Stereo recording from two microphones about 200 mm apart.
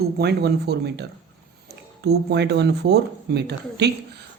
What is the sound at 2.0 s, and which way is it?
Speech, 55° right (ahead or behind).